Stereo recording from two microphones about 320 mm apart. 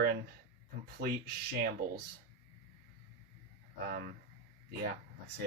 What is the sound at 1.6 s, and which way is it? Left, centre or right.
Speech, right.